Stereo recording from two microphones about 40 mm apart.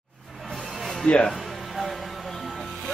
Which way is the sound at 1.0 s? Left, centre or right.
Left.